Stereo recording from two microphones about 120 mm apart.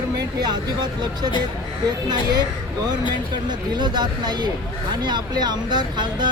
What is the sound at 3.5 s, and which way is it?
Speech, 35° right (ahead or behind).